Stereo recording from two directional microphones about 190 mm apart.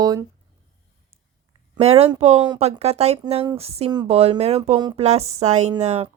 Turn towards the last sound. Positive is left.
turn(degrees=-30)  # may be behind; listen again after turning